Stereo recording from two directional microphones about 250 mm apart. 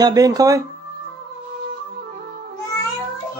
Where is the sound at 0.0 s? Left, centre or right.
Centre.